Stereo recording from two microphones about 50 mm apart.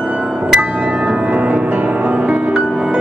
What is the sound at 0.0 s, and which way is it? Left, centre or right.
Music, centre.